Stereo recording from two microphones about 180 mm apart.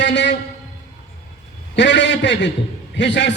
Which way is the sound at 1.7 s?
80° left.